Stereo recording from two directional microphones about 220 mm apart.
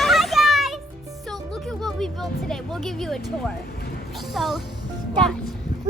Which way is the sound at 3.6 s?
45° left (ahead or behind).